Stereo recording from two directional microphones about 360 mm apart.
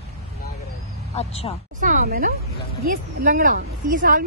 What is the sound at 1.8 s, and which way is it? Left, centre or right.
Speech, right.